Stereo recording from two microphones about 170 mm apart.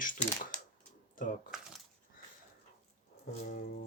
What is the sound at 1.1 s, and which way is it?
Speech, 50° left (ahead or behind).